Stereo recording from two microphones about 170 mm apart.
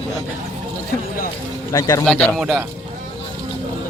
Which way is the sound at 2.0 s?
5° left (ahead or behind).